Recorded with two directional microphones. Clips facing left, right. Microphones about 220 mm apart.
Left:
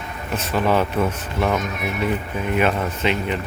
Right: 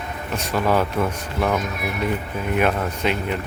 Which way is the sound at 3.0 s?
5° right (ahead or behind).